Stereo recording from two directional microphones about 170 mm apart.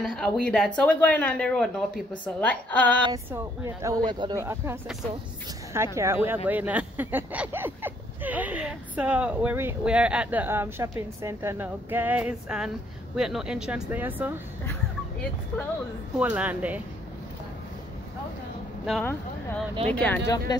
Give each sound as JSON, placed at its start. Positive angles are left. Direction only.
{"t": 0.0, "sound": "speech", "side_deg": 5}
{"t": 3.3, "sound": "speech", "side_deg": -20}
{"t": 14.7, "sound": "a sound", "side_deg": 10}
{"t": 16.2, "sound": "speech", "side_deg": -10}
{"t": 19.9, "sound": "speech", "side_deg": 10}